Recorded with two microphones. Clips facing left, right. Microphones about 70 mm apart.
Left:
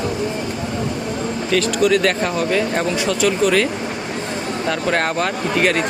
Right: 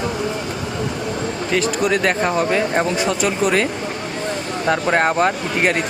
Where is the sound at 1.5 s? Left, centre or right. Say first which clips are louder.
Left 3 dB; right.